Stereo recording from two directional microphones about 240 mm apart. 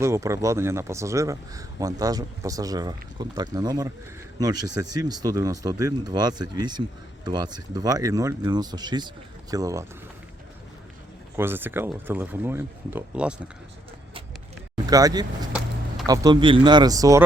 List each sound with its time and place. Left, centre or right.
0.0 s a man's voice: centre
11.3 s a man's voice: centre
14.8 s a man's voice: centre